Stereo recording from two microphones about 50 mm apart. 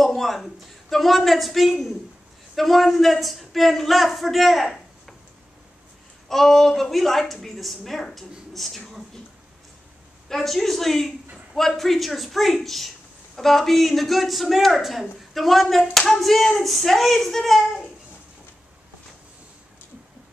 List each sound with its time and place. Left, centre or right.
0.0 s a woman's voice: centre
4.6 s a sound: centre
6.2 s a woman's voice: centre
10.2 s a woman's voice: centre